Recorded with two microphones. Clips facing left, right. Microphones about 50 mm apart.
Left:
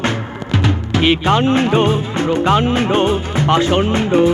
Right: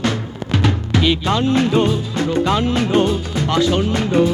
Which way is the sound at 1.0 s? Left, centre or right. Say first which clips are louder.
Left 4 dB; left.